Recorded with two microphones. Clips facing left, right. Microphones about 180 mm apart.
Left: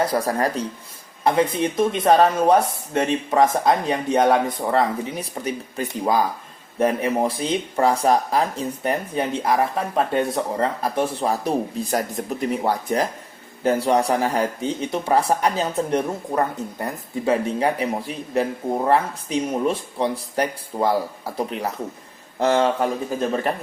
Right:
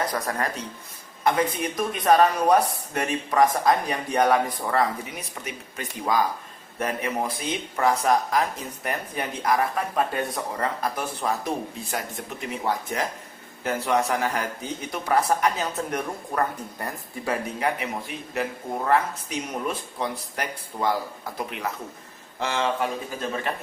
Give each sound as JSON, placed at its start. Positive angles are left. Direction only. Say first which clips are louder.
{"t": 0.1, "sound": "speech", "louder": "left 6 dB", "side_deg": 35}
{"t": 17.6, "sound": "speech", "louder": "left 5 dB", "side_deg": 35}